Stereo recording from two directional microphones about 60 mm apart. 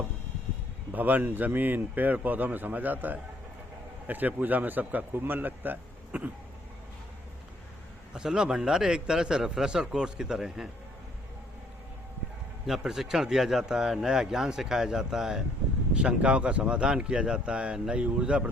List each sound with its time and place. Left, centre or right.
0.9 s a man's voice: right
8.1 s speech: centre
12.6 s speech: centre